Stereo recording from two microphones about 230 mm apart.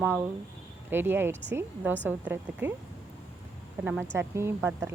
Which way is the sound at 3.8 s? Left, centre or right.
Centre.